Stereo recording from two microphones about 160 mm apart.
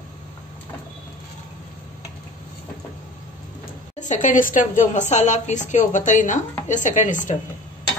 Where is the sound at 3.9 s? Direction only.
50° left (ahead or behind).